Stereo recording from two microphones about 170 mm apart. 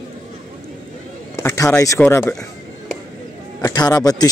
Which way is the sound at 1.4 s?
15° left (ahead or behind).